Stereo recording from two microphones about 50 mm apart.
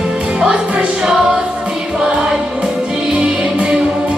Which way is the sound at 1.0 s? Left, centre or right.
Centre.